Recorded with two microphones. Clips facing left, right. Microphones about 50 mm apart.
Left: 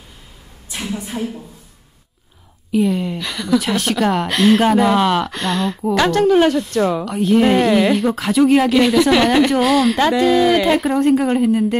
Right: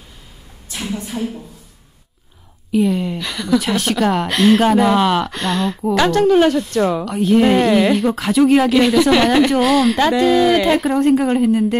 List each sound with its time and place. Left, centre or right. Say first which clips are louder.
0.9 s speech: right 1 dB; centre
2.7 s a woman's voice: right 1 dB; centre